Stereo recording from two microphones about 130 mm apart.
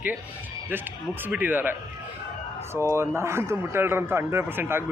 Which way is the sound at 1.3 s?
15° right (ahead or behind).